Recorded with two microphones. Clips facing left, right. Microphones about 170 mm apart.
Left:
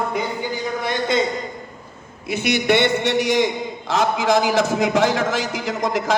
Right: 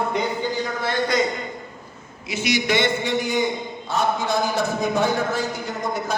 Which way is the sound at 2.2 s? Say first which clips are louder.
Left 4 dB; 55° left (ahead or behind).